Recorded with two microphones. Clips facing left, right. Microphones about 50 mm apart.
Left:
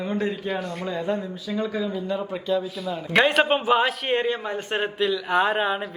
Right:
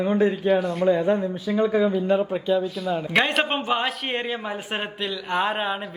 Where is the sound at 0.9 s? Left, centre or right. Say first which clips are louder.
Right 6 dB; right.